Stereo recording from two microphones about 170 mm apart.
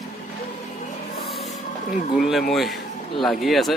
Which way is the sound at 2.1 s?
Centre (ahead or behind).